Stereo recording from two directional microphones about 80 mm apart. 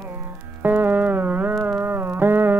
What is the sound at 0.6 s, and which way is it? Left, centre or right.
Music, right.